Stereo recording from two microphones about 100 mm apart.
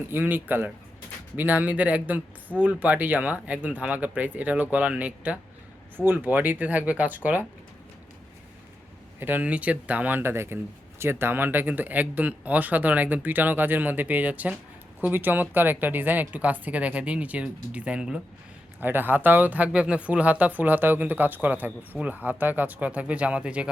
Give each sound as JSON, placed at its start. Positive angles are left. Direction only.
{"t": 0.1, "sound": "speech", "side_deg": -20}
{"t": 9.2, "sound": "speech", "side_deg": -15}